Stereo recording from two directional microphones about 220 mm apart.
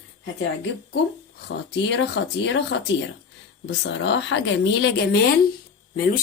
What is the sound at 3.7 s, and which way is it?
Speech, 55° left (ahead or behind).